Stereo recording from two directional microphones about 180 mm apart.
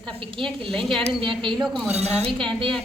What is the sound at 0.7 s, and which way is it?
Speech, centre (ahead or behind).